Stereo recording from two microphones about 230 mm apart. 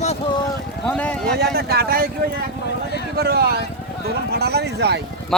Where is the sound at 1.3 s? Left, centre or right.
Right.